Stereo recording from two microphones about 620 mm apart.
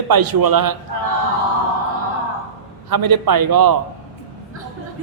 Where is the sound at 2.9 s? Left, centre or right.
Right.